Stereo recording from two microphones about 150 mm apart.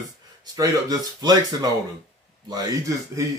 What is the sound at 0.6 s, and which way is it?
Speech, 25° right (ahead or behind).